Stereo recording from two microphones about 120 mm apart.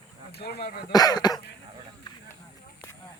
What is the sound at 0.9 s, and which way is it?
Speech, 35° left (ahead or behind).